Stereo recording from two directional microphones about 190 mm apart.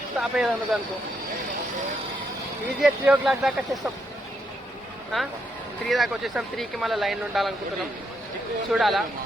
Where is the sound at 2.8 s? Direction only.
5° right (ahead or behind).